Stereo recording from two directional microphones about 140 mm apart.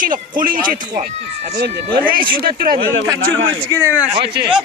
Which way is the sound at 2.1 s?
90° right.